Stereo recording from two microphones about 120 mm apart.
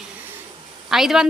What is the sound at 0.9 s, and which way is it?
Speech, 5° right (ahead or behind).